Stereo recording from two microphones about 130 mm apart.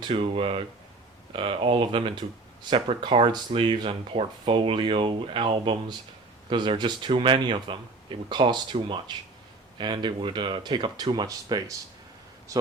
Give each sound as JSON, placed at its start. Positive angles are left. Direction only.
{"t": 0.0, "sound": "speech", "side_deg": -45}